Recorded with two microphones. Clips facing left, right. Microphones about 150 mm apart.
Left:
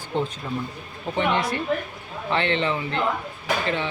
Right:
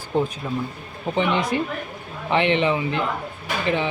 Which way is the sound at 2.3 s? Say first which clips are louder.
Right 4 dB; 15° right (ahead or behind).